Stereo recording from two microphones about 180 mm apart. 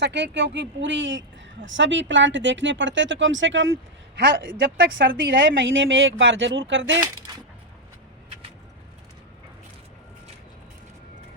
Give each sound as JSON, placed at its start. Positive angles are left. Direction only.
{"t": 0.0, "sound": "speech", "side_deg": -75}
{"t": 7.0, "sound": "speech", "side_deg": -20}